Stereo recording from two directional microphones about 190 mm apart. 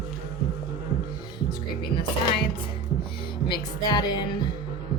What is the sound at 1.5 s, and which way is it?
Music, 25° left (ahead or behind).